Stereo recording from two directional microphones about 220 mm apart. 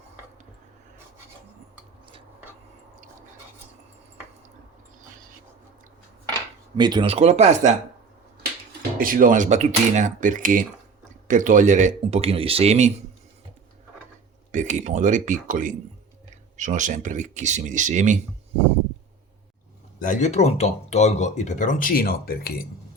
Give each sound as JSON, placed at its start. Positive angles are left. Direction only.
{"t": 6.7, "sound": "speech", "side_deg": -20}
{"t": 9.0, "sound": "speech", "side_deg": -40}
{"t": 14.5, "sound": "speech", "side_deg": -35}
{"t": 20.0, "sound": "speech", "side_deg": 35}